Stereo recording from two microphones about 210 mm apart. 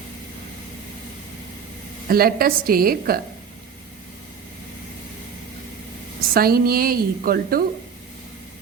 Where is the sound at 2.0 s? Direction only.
45° right (ahead or behind).